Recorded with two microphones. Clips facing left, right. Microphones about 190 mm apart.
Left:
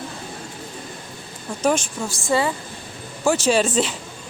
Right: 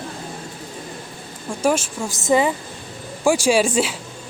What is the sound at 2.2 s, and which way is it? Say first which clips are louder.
Speech: right 4 dB; 20° right (ahead or behind).